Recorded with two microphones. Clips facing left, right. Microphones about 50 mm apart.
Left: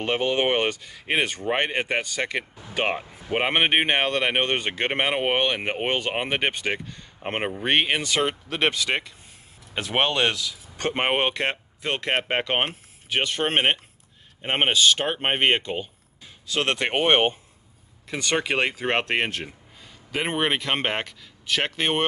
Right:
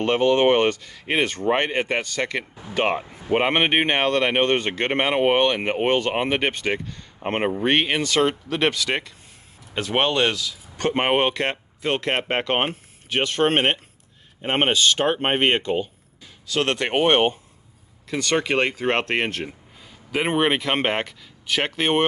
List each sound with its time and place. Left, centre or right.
0.0 s speech: centre
2.8 s speech: centre; by 10.9 s left
11.0 s speech: centre
11.2 s speech: centre
11.8 s speech: centre
16.4 s speech: left; by 22.0 s centre